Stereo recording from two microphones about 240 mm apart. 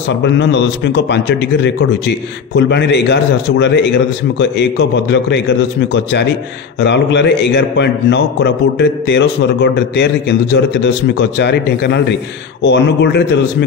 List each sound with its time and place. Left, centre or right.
0.2 s a man's voice: left